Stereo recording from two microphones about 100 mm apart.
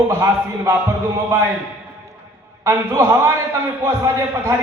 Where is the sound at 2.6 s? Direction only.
25° right (ahead or behind).